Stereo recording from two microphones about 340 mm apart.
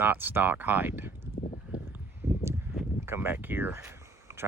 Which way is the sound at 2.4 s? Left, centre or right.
Centre.